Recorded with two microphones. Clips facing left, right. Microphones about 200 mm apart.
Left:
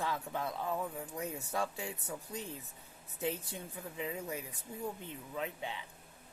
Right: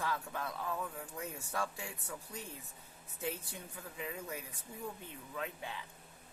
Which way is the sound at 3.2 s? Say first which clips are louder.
Left 4 dB; 20° left (ahead or behind).